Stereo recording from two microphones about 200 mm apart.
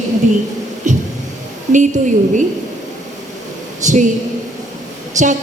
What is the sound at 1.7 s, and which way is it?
Speech, 40° right (ahead or behind).